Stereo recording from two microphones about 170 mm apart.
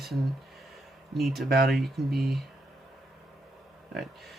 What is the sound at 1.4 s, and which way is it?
Speech, 70° right (ahead or behind).